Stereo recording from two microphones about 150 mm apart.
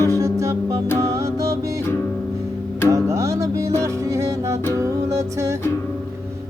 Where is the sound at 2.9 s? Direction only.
20° right (ahead or behind).